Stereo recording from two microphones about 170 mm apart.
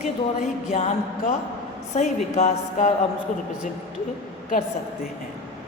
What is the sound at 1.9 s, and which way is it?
Speech, 45° left (ahead or behind).